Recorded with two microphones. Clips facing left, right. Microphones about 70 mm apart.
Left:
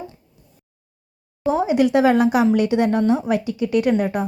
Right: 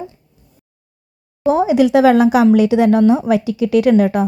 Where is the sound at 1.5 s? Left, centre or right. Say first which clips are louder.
Right 5 dB; right.